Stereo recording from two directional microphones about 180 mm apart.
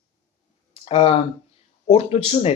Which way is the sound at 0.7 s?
30° left (ahead or behind).